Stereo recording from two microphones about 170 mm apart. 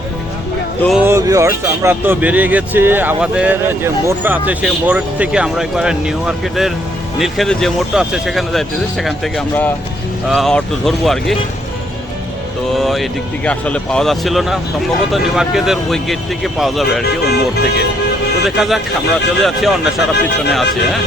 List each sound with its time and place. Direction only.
0.9 s speech: 15° right (ahead or behind); by 11.3 s centre (ahead or behind)
12.7 s speech: centre (ahead or behind)
17.0 s speech: 70° left (ahead or behind)
18.4 s speech: centre (ahead or behind)